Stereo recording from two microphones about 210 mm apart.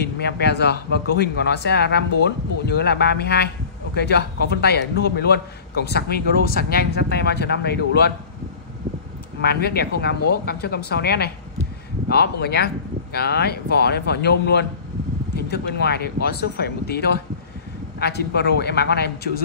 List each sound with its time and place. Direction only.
0.0 s a man's voice: 50° left (ahead or behind)
9.4 s a man's voice: 50° left (ahead or behind)